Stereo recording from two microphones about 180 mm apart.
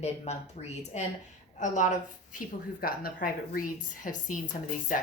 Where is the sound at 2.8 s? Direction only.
55° left (ahead or behind).